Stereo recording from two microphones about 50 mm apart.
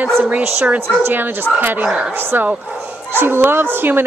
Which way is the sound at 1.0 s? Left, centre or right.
Right.